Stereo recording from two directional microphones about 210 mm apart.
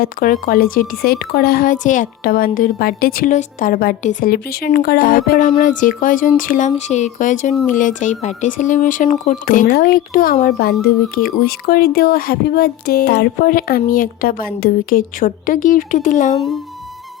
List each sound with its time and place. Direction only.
0.0 s a woman's voice: 40° left (ahead or behind)